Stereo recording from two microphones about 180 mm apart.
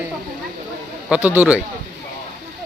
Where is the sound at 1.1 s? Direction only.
5° right (ahead or behind).